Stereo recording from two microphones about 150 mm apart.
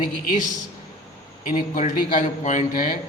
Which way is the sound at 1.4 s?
60° left (ahead or behind).